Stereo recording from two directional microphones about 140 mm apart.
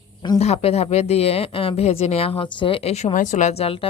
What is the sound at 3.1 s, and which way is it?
Speech, 65° left (ahead or behind).